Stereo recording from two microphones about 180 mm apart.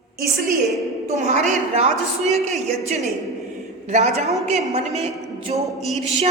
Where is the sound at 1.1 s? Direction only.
40° right (ahead or behind).